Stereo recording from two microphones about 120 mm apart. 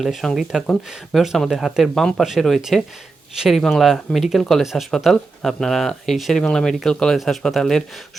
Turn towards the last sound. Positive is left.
turn(degrees=5)  # may be behind; listen again after turning